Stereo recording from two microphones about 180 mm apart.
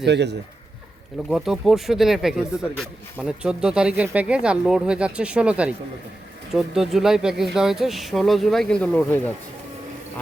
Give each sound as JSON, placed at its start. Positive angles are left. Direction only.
{"t": 0.0, "sound": "speech", "side_deg": -75}
{"t": 1.3, "sound": "speech", "side_deg": 0}